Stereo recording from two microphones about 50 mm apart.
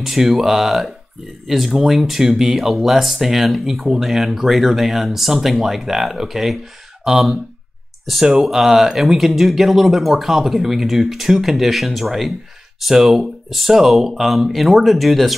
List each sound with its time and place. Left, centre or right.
0.0 s speech: centre